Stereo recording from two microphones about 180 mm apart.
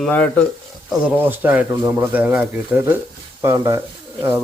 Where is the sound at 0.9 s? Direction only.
10° right (ahead or behind).